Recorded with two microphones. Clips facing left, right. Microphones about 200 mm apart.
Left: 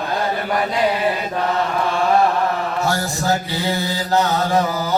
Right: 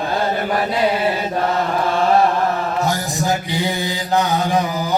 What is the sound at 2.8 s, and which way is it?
Mantra, 15° right (ahead or behind).